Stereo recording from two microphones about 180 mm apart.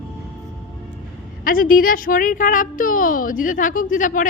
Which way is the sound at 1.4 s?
50° left (ahead or behind).